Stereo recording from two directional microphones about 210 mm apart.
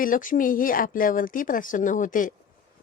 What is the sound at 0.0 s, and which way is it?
Speech, 40° left (ahead or behind).